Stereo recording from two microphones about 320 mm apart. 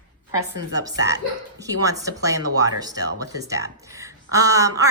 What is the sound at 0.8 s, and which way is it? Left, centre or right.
A woman's voice, centre.